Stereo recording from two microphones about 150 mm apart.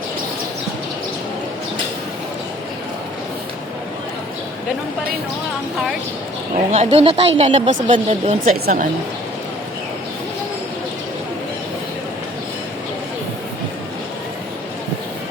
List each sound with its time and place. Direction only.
6.7 s speech: 50° right (ahead or behind)
8.4 s speech: 75° right (ahead or behind)